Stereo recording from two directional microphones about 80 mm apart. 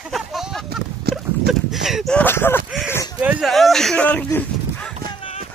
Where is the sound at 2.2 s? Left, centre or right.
Left.